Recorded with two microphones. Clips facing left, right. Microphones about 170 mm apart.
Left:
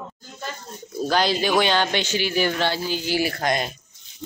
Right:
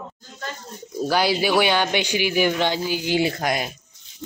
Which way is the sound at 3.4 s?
5° right (ahead or behind).